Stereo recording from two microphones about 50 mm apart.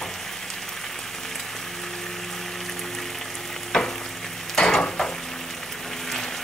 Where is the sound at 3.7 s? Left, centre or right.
Centre.